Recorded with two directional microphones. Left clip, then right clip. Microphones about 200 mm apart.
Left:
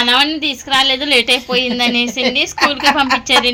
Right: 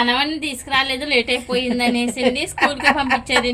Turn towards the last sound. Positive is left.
turn(degrees=5)  # may be behind; listen again after turning